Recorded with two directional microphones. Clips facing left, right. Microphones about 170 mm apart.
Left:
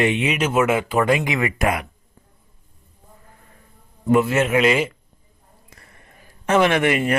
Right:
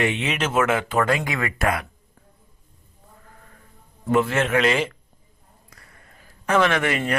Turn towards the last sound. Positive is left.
turn(degrees=20)  # may be behind; listen again after turning